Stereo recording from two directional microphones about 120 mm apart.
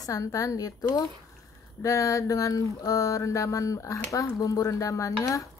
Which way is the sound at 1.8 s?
30° left (ahead or behind).